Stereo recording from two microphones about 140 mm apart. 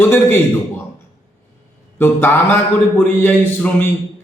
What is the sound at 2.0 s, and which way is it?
A man's voice, 15° left (ahead or behind).